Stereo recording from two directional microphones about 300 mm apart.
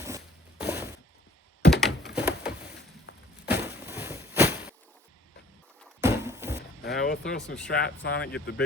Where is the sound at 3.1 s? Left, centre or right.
Left.